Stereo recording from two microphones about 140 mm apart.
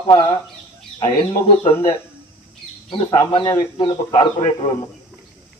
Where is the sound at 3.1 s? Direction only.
30° left (ahead or behind).